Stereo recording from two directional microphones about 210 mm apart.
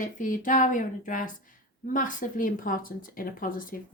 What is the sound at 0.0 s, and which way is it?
A woman's voice, 40° left (ahead or behind).